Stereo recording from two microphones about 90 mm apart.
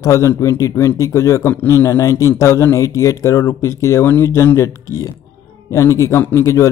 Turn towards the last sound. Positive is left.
turn(degrees=35)  # may be behind; listen again after turning